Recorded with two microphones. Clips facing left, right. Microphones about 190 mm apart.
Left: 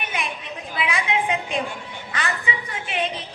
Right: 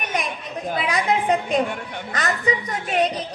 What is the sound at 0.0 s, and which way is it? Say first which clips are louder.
Chatter: right 3 dB; 40° right (ahead or behind).